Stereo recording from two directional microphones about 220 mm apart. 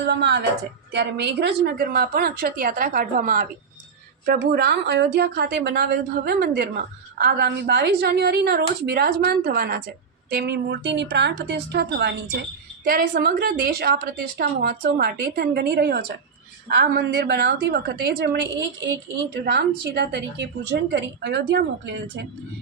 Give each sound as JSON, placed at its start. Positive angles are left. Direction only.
{"t": 0.1, "sound": "a woman's voice", "side_deg": -50}